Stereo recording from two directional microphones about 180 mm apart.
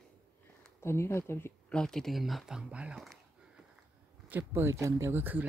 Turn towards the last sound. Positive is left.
turn(degrees=-10)  # may be behind; listen again after turning